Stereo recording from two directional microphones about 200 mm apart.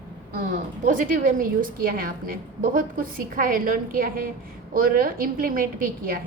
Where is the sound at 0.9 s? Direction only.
45° right (ahead or behind).